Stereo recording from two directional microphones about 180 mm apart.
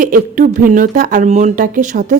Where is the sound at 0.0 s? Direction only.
50° right (ahead or behind).